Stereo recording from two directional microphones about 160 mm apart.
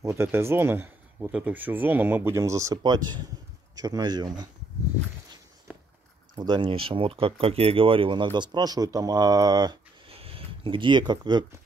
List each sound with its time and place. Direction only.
0.0 s speech: 15° right (ahead or behind)
5.7 s walk: 10° right (ahead or behind)
6.3 s speech: 25° right (ahead or behind)